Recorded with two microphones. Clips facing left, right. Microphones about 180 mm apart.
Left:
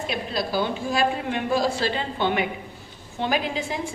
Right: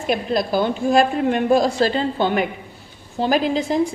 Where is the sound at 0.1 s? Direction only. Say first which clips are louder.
Right 9 dB; 50° right (ahead or behind).